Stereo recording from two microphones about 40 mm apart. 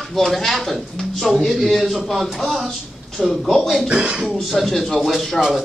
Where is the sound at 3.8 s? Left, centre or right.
Right.